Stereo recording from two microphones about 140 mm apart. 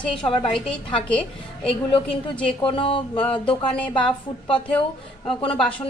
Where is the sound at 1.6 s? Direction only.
40° left (ahead or behind).